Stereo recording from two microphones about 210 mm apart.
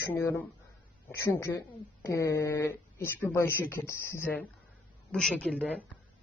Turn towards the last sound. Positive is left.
turn(degrees=5)  # may be behind; listen again after turning